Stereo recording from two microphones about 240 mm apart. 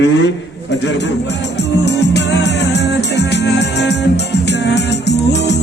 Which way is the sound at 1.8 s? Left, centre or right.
Left.